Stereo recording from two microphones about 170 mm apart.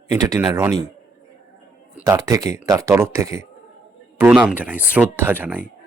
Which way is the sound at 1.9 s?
20° right (ahead or behind).